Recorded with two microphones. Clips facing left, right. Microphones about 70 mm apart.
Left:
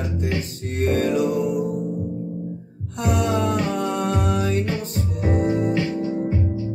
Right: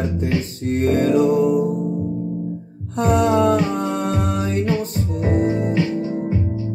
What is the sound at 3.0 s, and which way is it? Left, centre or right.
Music, right.